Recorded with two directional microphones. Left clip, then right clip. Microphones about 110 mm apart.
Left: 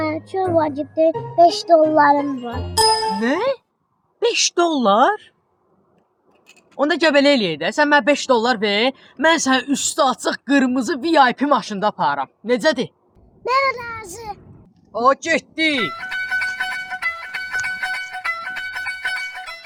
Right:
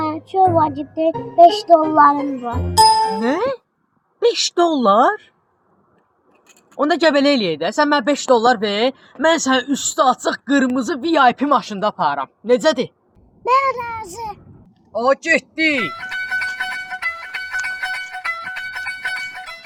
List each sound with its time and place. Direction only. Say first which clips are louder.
0.0 s speech: right 6 dB; 25° left (ahead or behind)
2.8 s speech: right 5 dB; centre (ahead or behind)
3.2 s a woman's voice: even; 15° left (ahead or behind)
6.7 s a child's voice: right 1 dB; 20° left (ahead or behind)
14.9 s music: right 1 dB; 10° left (ahead or behind)